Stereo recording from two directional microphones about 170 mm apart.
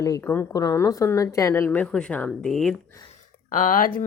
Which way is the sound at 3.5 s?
50° left (ahead or behind).